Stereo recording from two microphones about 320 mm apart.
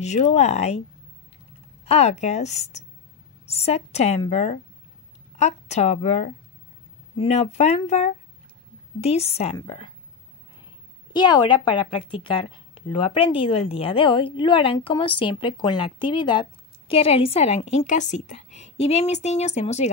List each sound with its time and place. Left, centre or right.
0.0 s a woman's voice: left
1.9 s a woman's voice: centre
11.1 s speech: centre